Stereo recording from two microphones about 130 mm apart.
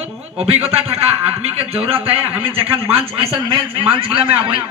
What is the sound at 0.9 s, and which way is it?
A man's voice, 50° right (ahead or behind).